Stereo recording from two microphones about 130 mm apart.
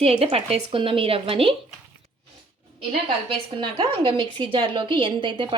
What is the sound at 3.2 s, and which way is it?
A woman's voice, 45° right (ahead or behind).